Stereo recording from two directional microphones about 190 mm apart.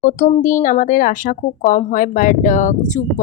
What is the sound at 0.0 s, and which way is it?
A woman's voice, 40° left (ahead or behind).